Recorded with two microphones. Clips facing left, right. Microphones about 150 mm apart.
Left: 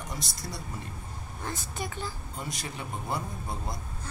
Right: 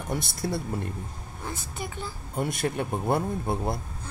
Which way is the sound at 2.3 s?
55° right (ahead or behind).